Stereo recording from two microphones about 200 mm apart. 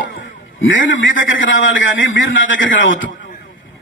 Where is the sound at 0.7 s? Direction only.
75° left (ahead or behind).